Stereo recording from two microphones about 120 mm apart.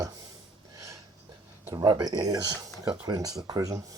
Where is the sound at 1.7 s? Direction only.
30° right (ahead or behind).